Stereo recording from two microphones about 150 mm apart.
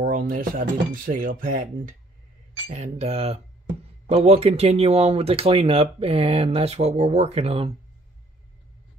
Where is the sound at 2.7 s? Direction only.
50° right (ahead or behind).